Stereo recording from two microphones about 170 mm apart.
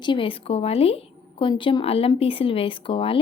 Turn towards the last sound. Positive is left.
turn(degrees=30)  # may be behind; listen again after turning